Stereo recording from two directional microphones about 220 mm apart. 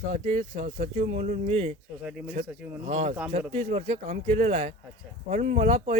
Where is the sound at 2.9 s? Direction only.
30° right (ahead or behind).